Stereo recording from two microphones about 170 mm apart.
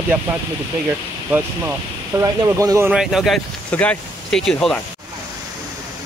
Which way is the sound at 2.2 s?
20° right (ahead or behind).